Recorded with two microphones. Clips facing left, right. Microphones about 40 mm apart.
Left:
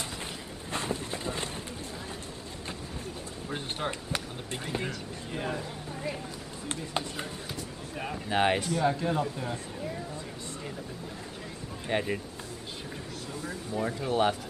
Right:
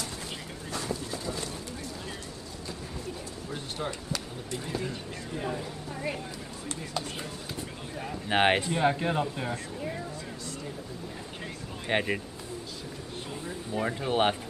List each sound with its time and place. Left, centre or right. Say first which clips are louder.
0.7 s a sound: left 1 dB; left
3.4 s speech: left 2 dB; left
6.7 s speech: left 2 dB; left
8.3 s speech: right 2 dB; right
11.9 s speech: right 2 dB; right
13.7 s speech: right 1 dB; right